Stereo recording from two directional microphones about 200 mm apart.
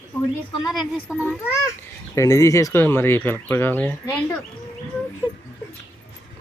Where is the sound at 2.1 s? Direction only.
15° left (ahead or behind).